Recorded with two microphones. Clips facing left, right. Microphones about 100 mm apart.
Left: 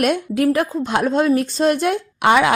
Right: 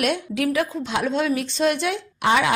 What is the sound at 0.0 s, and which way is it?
A woman's voice, 45° left (ahead or behind).